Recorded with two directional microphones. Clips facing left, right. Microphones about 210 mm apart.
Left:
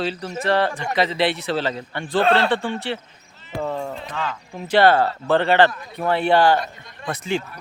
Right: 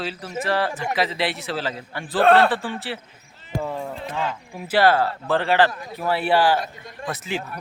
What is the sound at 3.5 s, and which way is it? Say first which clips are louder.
Speech: left 1 dB; 45° right (ahead or behind).